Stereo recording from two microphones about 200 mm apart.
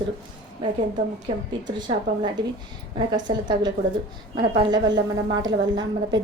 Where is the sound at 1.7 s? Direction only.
20° right (ahead or behind).